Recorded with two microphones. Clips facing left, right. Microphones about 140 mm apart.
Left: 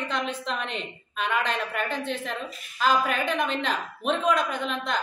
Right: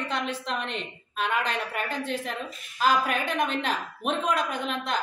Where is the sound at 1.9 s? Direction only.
40° right (ahead or behind).